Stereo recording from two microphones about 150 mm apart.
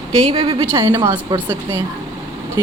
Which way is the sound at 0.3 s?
40° right (ahead or behind).